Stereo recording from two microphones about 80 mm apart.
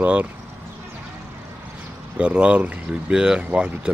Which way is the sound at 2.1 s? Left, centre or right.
Centre.